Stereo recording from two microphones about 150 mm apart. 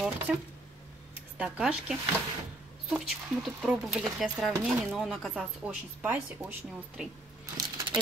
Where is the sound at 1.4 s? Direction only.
5° right (ahead or behind).